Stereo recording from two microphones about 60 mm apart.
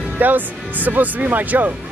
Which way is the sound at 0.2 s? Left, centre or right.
Right.